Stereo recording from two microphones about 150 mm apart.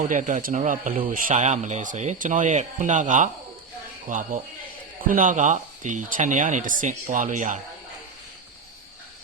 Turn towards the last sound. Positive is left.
turn(degrees=-55)  # may be behind; listen again after turning